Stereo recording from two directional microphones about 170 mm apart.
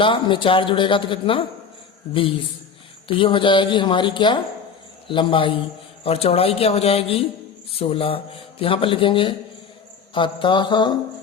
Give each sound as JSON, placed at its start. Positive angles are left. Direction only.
{"t": 0.0, "sound": "speech", "side_deg": 30}
{"t": 3.1, "sound": "a woman's voice", "side_deg": 30}